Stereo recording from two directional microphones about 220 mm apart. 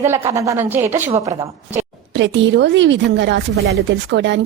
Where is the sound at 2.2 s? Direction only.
55° right (ahead or behind).